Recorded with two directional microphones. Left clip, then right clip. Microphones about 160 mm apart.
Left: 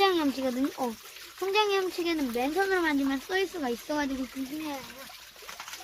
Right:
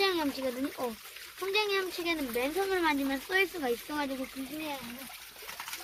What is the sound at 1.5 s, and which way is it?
Speech, 40° left (ahead or behind).